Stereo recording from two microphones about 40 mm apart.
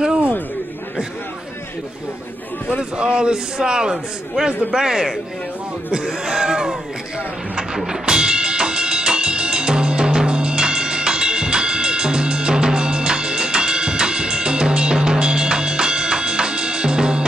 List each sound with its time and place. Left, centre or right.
2.8 s a man's voice: centre
7.5 s music: centre